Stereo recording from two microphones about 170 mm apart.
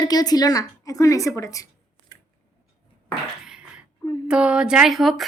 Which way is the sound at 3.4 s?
5° right (ahead or behind).